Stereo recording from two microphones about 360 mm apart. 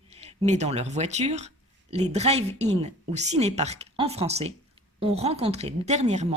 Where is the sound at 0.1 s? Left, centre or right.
Centre.